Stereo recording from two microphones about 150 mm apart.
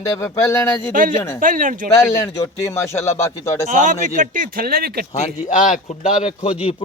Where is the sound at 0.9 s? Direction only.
60° right (ahead or behind).